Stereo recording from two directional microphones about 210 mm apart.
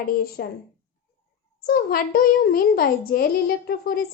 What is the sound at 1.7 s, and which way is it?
A child's voice, 45° left (ahead or behind).